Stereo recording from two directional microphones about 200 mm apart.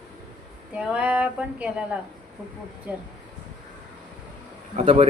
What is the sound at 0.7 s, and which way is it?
Speech, 5° right (ahead or behind).